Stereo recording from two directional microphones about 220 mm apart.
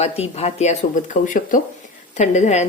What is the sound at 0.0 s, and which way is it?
A woman's voice, 30° left (ahead or behind).